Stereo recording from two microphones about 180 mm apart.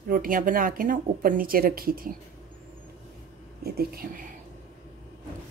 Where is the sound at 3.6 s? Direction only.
60° right (ahead or behind).